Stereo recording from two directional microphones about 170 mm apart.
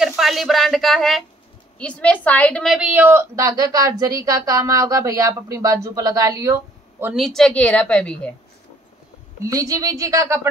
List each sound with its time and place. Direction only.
0.0 s a woman's voice: centre (ahead or behind)
7.2 s a woman's voice: centre (ahead or behind)
9.4 s a woman's voice: 20° right (ahead or behind)